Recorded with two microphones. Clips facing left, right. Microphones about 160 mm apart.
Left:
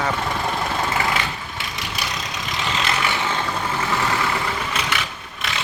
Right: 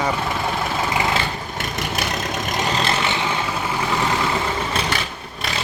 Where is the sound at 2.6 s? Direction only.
40° right (ahead or behind).